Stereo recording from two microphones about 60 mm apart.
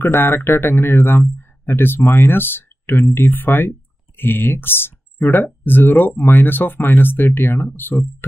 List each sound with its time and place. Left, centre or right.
0.0 s speech: left